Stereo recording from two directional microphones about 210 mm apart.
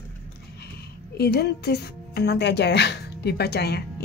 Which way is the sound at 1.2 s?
50° left (ahead or behind).